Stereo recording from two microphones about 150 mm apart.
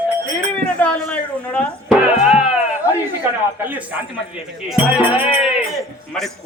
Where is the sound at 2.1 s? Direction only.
5° right (ahead or behind).